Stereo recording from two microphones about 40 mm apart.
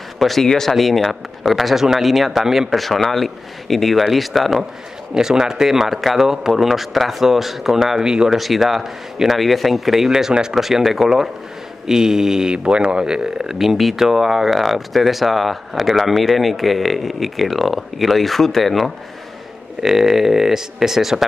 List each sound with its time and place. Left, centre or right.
0.2 s speech: centre
2.7 s speech: centre
5.1 s speech: centre
8.0 s speech: centre
8.3 s speech: centre
12.5 s speech: right; by 18.9 s centre
19.8 s speech: centre